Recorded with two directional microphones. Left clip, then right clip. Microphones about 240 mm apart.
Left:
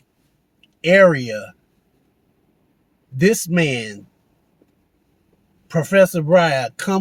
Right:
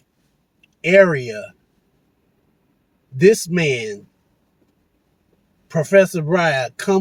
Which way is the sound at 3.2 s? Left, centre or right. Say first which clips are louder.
Right 3 dB; left.